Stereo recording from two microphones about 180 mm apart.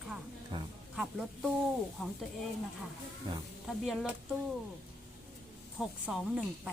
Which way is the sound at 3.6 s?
Centre (ahead or behind).